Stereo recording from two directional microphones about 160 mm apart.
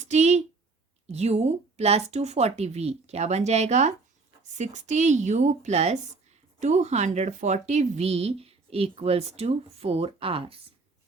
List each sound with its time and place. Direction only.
0.0 s a woman's voice: 45° right (ahead or behind)